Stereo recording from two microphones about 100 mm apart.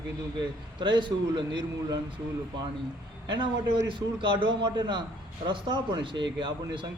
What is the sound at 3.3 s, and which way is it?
A man's voice, 55° right (ahead or behind).